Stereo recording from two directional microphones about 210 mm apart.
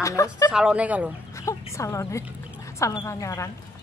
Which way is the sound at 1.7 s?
15° left (ahead or behind).